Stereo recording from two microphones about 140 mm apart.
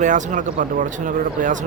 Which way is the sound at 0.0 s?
60° right (ahead or behind).